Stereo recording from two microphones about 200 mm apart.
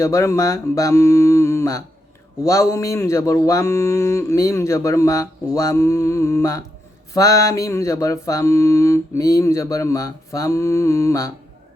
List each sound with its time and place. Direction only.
0.0 s speech: 15° left (ahead or behind)